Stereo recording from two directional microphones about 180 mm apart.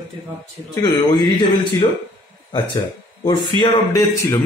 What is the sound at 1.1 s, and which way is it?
A man's voice, 25° left (ahead or behind).